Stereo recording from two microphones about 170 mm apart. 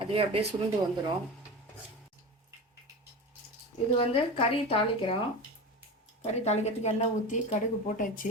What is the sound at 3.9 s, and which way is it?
A woman's voice, 35° left (ahead or behind).